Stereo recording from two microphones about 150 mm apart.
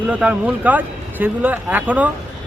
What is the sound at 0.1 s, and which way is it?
Speech, 10° right (ahead or behind).